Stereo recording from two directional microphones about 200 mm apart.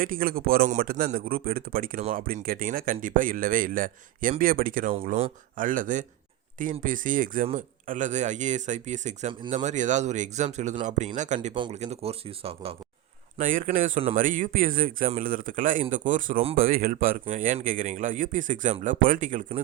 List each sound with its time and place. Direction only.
0.0 s speech: 45° right (ahead or behind); by 12.7 s 30° right (ahead or behind)
13.4 s speech: 40° right (ahead or behind)